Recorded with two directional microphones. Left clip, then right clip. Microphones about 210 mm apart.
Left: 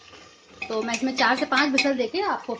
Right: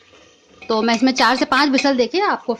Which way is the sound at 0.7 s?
50° right (ahead or behind).